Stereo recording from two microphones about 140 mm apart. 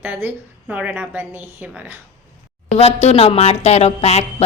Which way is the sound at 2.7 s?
50° left (ahead or behind).